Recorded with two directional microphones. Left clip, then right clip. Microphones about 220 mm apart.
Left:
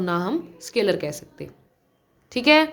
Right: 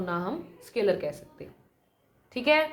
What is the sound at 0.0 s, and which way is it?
A woman's voice, 50° left (ahead or behind).